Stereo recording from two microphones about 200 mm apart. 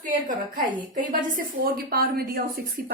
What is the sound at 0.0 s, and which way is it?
A woman's voice, 45° right (ahead or behind).